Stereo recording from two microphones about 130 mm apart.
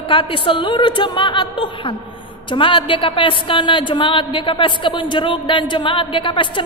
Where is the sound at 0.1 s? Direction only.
40° left (ahead or behind).